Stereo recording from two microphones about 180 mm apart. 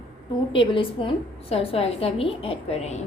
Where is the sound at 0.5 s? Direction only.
30° left (ahead or behind).